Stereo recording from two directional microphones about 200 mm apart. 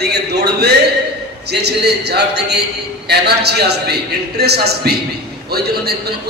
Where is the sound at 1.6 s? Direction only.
55° right (ahead or behind).